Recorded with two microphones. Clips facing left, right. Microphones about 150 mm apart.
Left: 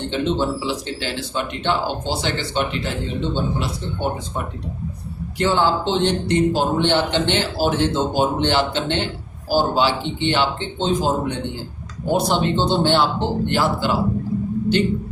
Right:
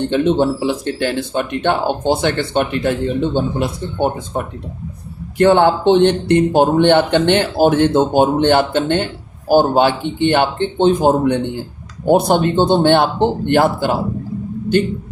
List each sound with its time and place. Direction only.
0.1 s speech: 55° right (ahead or behind)
5.4 s speech: 60° right (ahead or behind)